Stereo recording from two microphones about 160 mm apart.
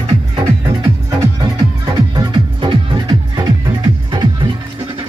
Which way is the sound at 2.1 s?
30° right (ahead or behind).